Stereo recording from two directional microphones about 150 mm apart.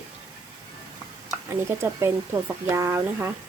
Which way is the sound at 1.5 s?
20° right (ahead or behind).